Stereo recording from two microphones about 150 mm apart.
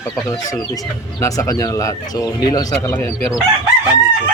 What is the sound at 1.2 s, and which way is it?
Speech, 20° left (ahead or behind).